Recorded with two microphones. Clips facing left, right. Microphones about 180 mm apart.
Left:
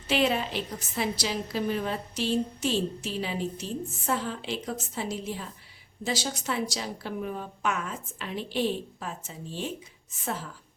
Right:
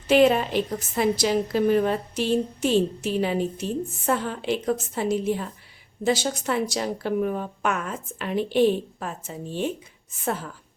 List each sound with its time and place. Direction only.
0.1 s a woman's voice: 50° right (ahead or behind)